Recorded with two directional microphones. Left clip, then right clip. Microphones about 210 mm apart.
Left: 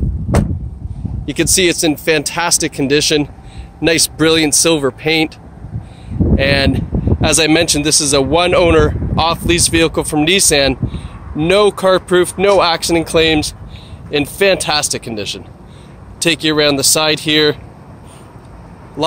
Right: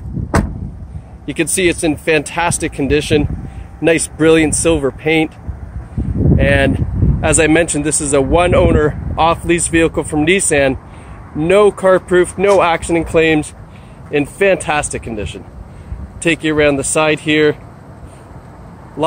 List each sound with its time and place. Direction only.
1.3 s speech: 20° left (ahead or behind)
6.4 s speech: 15° left (ahead or behind)